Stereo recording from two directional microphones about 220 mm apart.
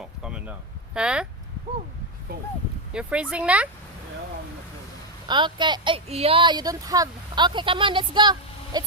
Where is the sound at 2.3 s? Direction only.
45° right (ahead or behind).